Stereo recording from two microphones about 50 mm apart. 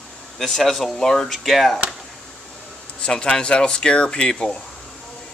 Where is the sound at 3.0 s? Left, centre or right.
Centre.